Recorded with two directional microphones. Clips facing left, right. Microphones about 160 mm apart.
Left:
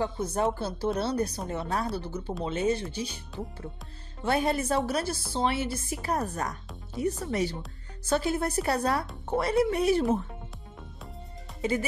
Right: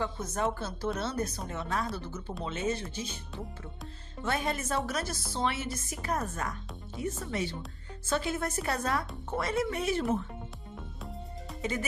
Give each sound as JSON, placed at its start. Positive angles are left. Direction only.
{"t": 0.0, "sound": "speech", "side_deg": 30}
{"t": 4.2, "sound": "speech", "side_deg": 35}